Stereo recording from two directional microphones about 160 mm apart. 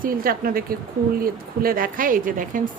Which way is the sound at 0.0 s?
65° right (ahead or behind).